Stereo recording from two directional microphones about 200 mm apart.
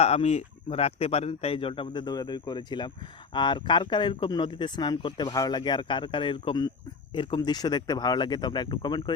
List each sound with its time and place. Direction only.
0.0 s speech: 30° left (ahead or behind)